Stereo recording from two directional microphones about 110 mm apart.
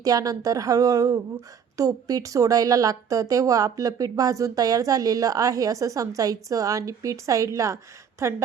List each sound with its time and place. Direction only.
0.0 s a woman's voice: 35° right (ahead or behind)